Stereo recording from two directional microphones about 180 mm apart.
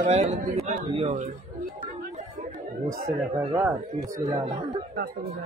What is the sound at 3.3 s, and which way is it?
Speech, 20° right (ahead or behind).